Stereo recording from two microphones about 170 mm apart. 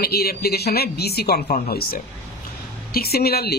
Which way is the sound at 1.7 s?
65° left (ahead or behind).